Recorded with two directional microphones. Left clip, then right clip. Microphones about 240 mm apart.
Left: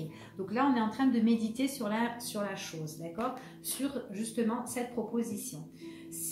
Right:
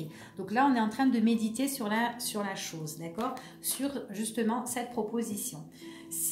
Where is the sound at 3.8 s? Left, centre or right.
Right.